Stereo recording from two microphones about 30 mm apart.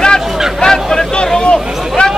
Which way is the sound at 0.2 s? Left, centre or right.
Centre.